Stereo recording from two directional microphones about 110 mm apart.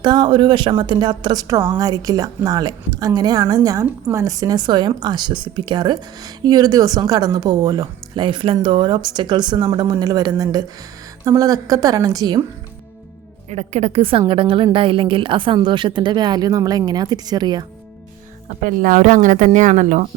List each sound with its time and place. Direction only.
0.0 s a woman's voice: 45° right (ahead or behind)
13.5 s a woman's voice: 80° right; by 17.7 s 40° right (ahead or behind)
19.5 s speech: 90° right